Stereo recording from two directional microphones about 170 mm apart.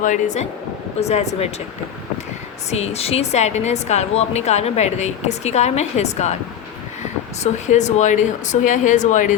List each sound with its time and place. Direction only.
0.0 s a woman's voice: 45° left (ahead or behind)
2.6 s a woman's voice: 40° left (ahead or behind)
7.4 s speech: 45° left (ahead or behind)